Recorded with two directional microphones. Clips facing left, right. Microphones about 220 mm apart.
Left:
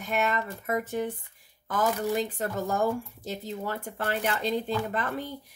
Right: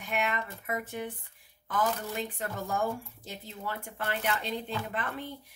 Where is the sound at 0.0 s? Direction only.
40° left (ahead or behind).